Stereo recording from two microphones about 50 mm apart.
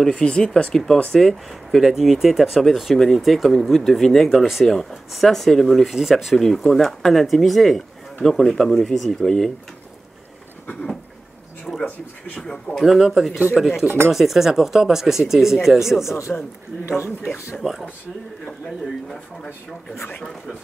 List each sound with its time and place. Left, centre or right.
0.0 s speech: centre
1.1 s speech: centre
6.3 s speech: centre
12.8 s speech: centre
13.8 s speech: right
14.1 s speech: centre
16.0 s speech: left
19.1 s speech: centre